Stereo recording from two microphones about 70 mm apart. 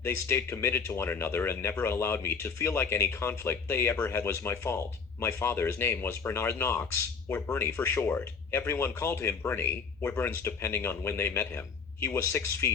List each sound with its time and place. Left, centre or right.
0.0 s speech: left
7.3 s speech: left